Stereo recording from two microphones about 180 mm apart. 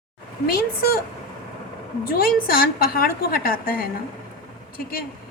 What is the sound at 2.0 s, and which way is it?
A woman's voice, 55° left (ahead or behind).